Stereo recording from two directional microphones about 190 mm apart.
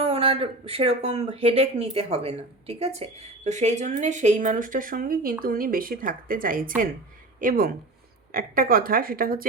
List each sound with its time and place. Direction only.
0.0 s a woman's voice: 30° right (ahead or behind); by 9.4 s 50° right (ahead or behind)